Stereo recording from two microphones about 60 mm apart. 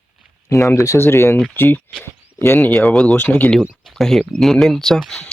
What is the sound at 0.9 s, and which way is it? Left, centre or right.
Speech, left.